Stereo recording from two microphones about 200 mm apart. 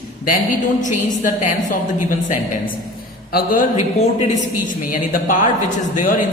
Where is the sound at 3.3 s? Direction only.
45° left (ahead or behind).